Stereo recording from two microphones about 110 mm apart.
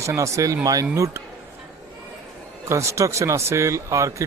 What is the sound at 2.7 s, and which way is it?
Speech, 25° right (ahead or behind).